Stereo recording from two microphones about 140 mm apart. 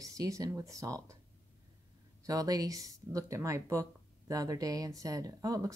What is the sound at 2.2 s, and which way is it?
Speech, 25° right (ahead or behind).